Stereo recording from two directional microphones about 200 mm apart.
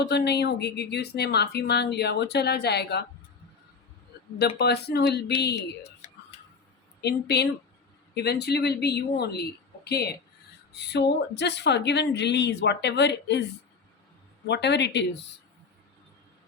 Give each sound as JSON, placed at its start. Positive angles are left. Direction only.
{"t": 0.0, "sound": "speech", "side_deg": 55}
{"t": 4.4, "sound": "speech", "side_deg": 55}
{"t": 7.0, "sound": "speech", "side_deg": 55}
{"t": 14.4, "sound": "speech", "side_deg": 60}